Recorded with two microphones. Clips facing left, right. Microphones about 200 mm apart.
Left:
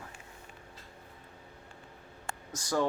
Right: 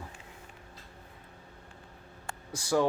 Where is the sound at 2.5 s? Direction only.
10° right (ahead or behind).